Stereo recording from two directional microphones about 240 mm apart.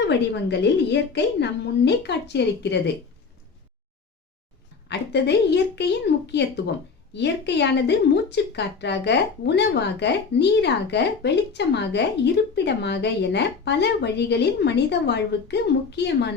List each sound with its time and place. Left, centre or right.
0.1 s a woman's voice: left
4.9 s a woman's voice: left